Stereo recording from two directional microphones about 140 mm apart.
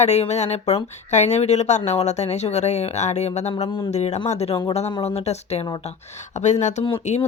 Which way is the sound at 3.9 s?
50° left (ahead or behind).